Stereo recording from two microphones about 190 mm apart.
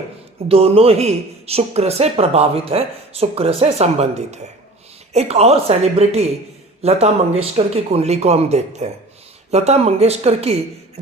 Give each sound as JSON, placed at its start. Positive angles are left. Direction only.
{"t": 0.4, "sound": "speech", "side_deg": -30}